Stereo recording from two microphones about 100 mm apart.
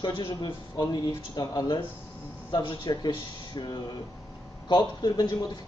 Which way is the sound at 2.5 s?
55° left (ahead or behind).